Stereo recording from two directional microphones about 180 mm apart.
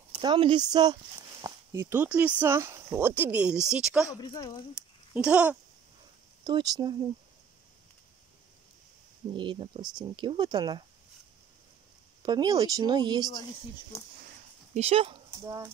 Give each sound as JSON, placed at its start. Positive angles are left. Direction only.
{"t": 0.1, "sound": "speech", "side_deg": -25}
{"t": 4.1, "sound": "a woman's voice", "side_deg": 25}
{"t": 5.1, "sound": "speech", "side_deg": -5}
{"t": 6.4, "sound": "speech", "side_deg": -20}
{"t": 9.3, "sound": "speech", "side_deg": -25}
{"t": 12.2, "sound": "speech", "side_deg": -20}
{"t": 14.7, "sound": "speech", "side_deg": -35}
{"t": 15.3, "sound": "speech", "side_deg": -15}